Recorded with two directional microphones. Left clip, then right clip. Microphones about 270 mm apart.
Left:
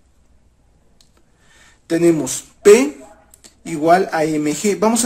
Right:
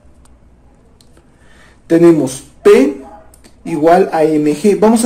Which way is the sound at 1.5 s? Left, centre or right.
Centre.